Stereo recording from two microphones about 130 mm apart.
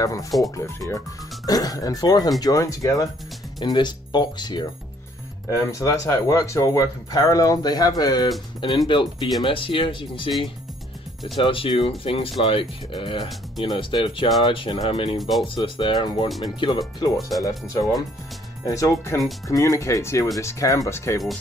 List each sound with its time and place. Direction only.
0.0 s speech: 25° left (ahead or behind)
5.5 s speech: 25° left (ahead or behind)
11.3 s speech: 45° left (ahead or behind)
15.1 s speech: centre (ahead or behind)
15.4 s speech: 40° left (ahead or behind); by 21.2 s 20° left (ahead or behind)